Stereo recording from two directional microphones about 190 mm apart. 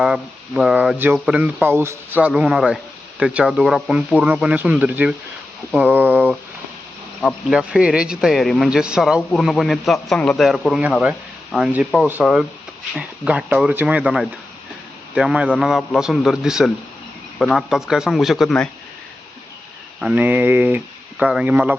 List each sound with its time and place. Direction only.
0.0 s speech: 5° right (ahead or behind)
20.0 s speech: 5° right (ahead or behind)